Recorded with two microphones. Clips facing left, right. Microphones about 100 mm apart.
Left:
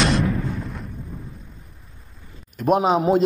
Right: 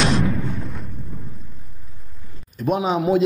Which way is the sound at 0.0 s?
Centre (ahead or behind).